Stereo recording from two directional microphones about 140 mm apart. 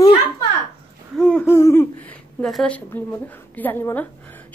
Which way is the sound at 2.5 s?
5° left (ahead or behind).